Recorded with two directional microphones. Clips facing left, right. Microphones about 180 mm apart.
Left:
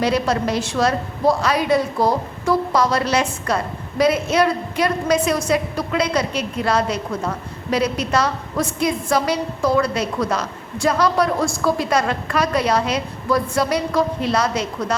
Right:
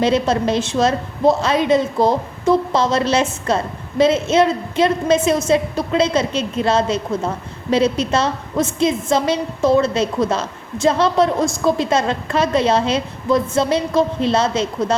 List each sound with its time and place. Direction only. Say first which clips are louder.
0.0 s a woman's voice: right 3 dB; 25° right (ahead or behind)